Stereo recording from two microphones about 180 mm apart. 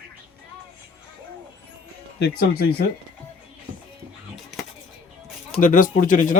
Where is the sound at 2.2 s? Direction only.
65° left (ahead or behind).